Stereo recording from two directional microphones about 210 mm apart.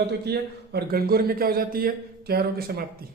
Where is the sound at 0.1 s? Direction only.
50° right (ahead or behind).